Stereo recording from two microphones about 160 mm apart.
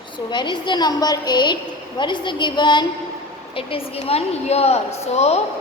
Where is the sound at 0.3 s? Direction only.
30° left (ahead or behind).